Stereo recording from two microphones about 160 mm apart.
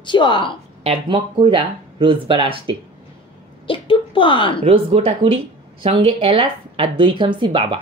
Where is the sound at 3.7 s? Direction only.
30° left (ahead or behind).